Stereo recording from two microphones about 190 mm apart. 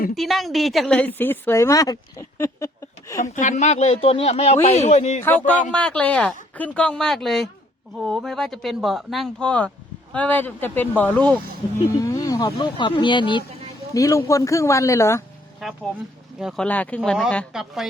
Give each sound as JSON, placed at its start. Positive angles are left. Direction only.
{"t": 0.1, "sound": "a woman's voice", "side_deg": 0}
{"t": 3.3, "sound": "speech", "side_deg": 40}
{"t": 5.7, "sound": "a woman's voice", "side_deg": 5}
{"t": 15.6, "sound": "speech", "side_deg": 0}